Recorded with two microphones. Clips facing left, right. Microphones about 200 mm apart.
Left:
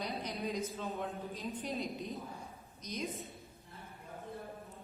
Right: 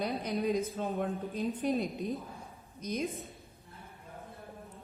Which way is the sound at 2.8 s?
55° right (ahead or behind).